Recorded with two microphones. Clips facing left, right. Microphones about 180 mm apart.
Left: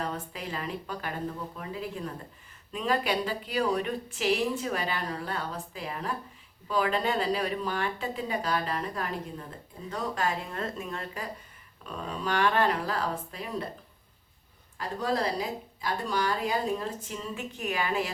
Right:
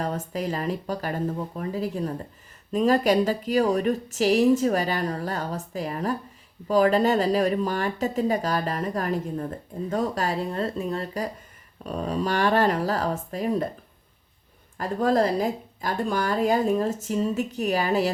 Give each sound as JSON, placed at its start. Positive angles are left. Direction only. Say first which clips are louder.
{"t": 0.0, "sound": "speech", "louder": "right 7 dB", "side_deg": -40}
{"t": 14.8, "sound": "speech", "louder": "right 8 dB", "side_deg": -50}